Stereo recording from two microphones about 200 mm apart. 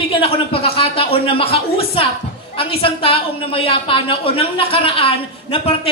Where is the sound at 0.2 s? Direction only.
25° left (ahead or behind).